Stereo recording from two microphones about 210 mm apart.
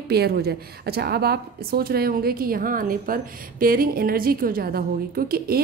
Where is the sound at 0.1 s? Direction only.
50° right (ahead or behind).